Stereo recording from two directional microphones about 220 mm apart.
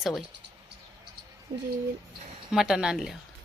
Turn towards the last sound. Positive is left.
turn(degrees=0)  # may be behind; listen again after turning